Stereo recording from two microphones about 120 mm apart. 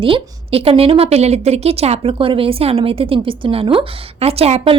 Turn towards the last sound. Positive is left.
turn(degrees=-55)  # may be behind; listen again after turning